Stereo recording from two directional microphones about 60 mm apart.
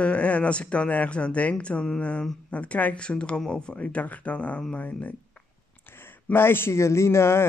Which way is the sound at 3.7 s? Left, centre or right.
Left.